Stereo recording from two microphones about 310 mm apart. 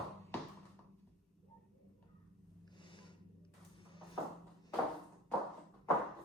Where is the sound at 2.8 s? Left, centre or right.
Centre.